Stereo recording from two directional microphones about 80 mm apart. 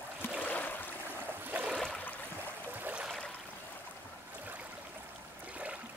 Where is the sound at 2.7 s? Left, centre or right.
Right.